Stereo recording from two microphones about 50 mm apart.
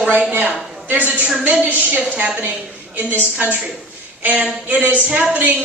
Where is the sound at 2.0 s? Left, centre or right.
Right.